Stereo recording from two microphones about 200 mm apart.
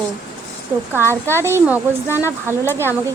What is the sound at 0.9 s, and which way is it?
Speech, 10° left (ahead or behind).